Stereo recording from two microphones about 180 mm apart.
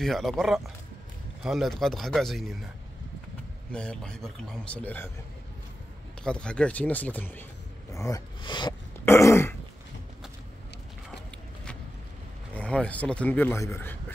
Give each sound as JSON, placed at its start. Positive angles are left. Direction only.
{"t": 0.0, "sound": "a man's voice", "side_deg": 0}
{"t": 3.7, "sound": "a man's voice", "side_deg": 5}
{"t": 6.2, "sound": "speech", "side_deg": 5}
{"t": 9.0, "sound": "throat clearing", "side_deg": 15}
{"t": 12.5, "sound": "speech", "side_deg": 5}